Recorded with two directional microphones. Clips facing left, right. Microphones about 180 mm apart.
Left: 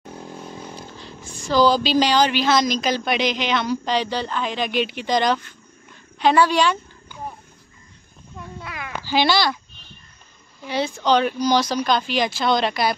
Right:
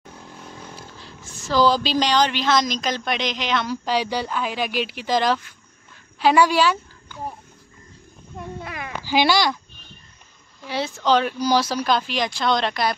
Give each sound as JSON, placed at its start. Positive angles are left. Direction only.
{"t": 0.1, "sound": "vehicle", "side_deg": 25}
{"t": 1.2, "sound": "speech", "side_deg": 15}
{"t": 1.5, "sound": "speech", "side_deg": 0}
{"t": 9.0, "sound": "speech", "side_deg": -10}
{"t": 10.6, "sound": "speech", "side_deg": 0}